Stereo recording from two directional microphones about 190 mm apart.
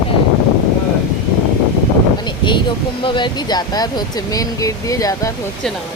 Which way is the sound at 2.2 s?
25° left (ahead or behind).